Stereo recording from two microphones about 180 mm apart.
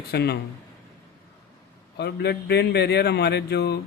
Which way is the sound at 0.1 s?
65° left (ahead or behind).